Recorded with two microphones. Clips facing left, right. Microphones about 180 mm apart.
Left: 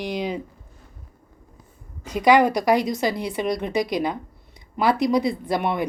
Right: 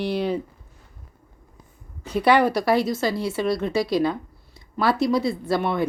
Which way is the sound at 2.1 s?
10° left (ahead or behind).